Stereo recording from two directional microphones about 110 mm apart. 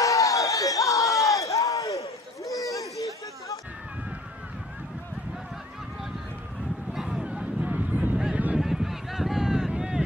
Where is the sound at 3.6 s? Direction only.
10° right (ahead or behind).